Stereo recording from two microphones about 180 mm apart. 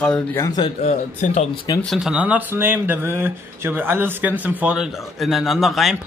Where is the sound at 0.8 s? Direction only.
40° left (ahead or behind).